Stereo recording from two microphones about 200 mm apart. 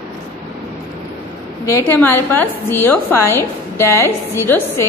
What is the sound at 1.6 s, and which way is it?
A woman's voice, 10° left (ahead or behind).